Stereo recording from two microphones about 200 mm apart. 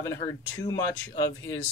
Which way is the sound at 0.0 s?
15° left (ahead or behind).